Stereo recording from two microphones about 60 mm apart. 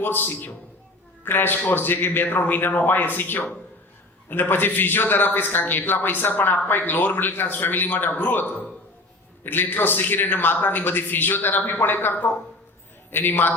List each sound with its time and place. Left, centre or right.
0.0 s a man's voice: left